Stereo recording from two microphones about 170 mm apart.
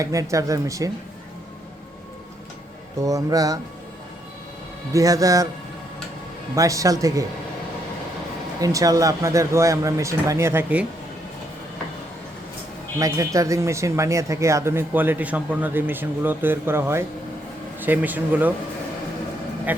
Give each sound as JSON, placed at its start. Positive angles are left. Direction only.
{"t": 0.0, "sound": "speech", "side_deg": -20}
{"t": 3.0, "sound": "speech", "side_deg": -20}
{"t": 4.9, "sound": "speech", "side_deg": -20}
{"t": 6.6, "sound": "speech", "side_deg": -20}
{"t": 8.6, "sound": "speech", "side_deg": -20}
{"t": 13.0, "sound": "speech", "side_deg": -20}